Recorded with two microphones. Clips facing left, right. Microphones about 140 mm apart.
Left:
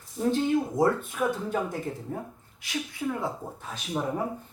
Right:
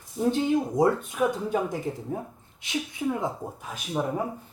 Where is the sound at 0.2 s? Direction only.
15° right (ahead or behind).